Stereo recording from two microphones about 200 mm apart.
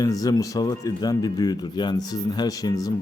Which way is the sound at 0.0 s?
20° left (ahead or behind).